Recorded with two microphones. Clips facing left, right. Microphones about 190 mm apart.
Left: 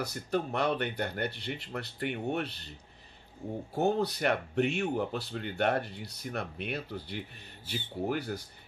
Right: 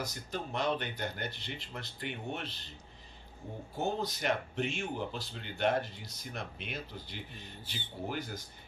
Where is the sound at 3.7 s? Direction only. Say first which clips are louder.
Left 6 dB; 65° left (ahead or behind).